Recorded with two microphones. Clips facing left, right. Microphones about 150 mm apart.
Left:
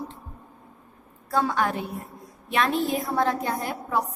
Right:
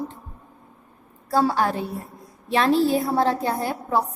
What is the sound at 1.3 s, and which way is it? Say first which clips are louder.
A woman's voice: right 4 dB; 35° right (ahead or behind).